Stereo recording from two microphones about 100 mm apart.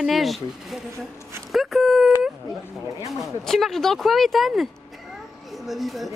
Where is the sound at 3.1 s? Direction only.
Centre (ahead or behind).